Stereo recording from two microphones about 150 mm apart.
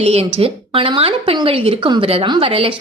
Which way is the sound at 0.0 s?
40° right (ahead or behind).